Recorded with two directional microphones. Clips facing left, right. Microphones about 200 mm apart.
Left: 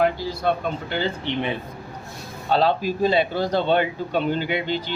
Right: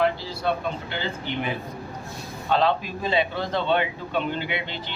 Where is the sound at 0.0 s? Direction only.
45° left (ahead or behind).